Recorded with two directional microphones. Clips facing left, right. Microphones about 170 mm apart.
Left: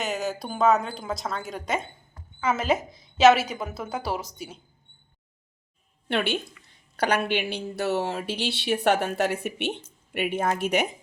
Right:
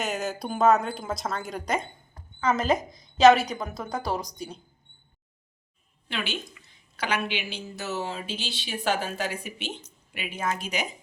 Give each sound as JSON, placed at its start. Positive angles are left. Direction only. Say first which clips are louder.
{"t": 0.0, "sound": "a woman's voice", "louder": "left 1 dB", "side_deg": 0}
{"t": 6.9, "sound": "a woman's voice", "louder": "left 5 dB", "side_deg": 60}